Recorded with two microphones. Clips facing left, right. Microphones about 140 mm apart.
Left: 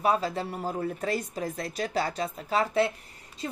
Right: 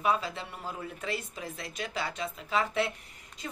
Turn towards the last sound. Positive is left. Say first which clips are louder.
# left 6 dB
turn(degrees=30)  # may be behind; listen again after turning